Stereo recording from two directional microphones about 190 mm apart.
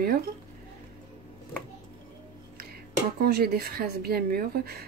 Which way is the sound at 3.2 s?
55° right (ahead or behind).